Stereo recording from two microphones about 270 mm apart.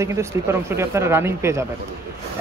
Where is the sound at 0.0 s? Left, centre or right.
Centre.